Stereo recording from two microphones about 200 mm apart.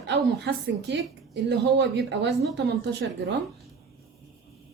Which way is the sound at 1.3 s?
60° right (ahead or behind).